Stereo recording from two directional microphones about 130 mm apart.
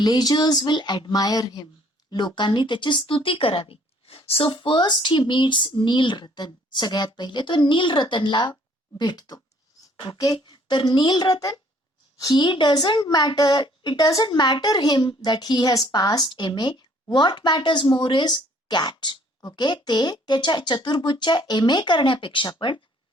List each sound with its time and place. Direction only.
0.0 s a woman's voice: 30° left (ahead or behind)